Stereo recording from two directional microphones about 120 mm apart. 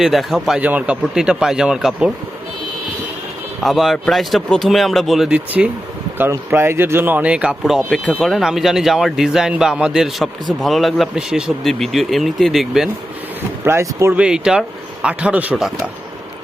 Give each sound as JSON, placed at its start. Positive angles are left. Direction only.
{"t": 0.0, "sound": "speech", "side_deg": 0}
{"t": 3.6, "sound": "speech", "side_deg": 0}
{"t": 13.7, "sound": "speech", "side_deg": -20}
{"t": 14.2, "sound": "speech", "side_deg": -5}